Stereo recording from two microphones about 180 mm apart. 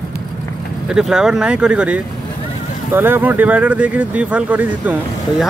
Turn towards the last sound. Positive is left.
turn(degrees=-10)  # may be behind; listen again after turning